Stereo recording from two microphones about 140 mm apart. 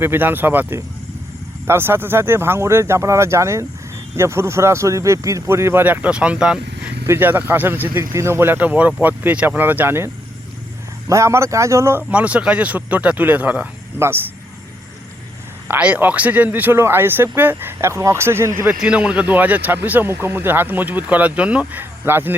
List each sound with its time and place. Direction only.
0.0 s speech: 15° right (ahead or behind)
11.1 s speech: 20° right (ahead or behind)
15.6 s speech: 10° right (ahead or behind)
18.6 s speech: 5° right (ahead or behind)